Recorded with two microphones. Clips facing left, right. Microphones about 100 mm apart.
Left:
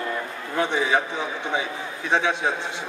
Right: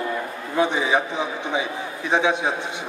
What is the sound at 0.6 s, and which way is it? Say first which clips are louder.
A man's voice: right 2 dB; 15° right (ahead or behind).